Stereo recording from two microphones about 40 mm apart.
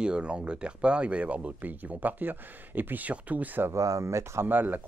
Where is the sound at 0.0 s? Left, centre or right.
Right.